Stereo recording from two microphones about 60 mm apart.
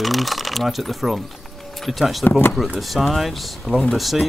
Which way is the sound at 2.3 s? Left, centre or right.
Left.